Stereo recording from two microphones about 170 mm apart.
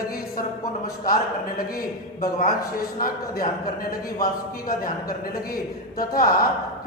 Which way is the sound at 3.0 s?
55° left (ahead or behind).